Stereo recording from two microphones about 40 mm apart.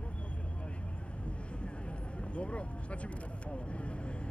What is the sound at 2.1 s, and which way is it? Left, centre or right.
Vehicle, left.